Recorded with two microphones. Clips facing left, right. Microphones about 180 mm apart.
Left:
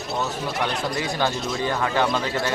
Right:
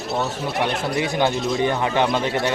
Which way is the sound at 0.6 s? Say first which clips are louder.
Right 5 dB; 20° right (ahead or behind).